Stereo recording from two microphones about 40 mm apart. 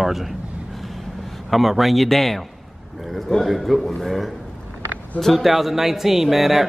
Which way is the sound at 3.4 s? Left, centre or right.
Centre.